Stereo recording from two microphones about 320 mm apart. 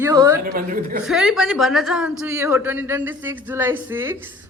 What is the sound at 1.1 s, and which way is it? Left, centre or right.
A man's voice, centre.